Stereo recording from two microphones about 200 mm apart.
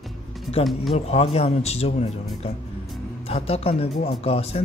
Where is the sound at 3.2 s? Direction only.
30° left (ahead or behind).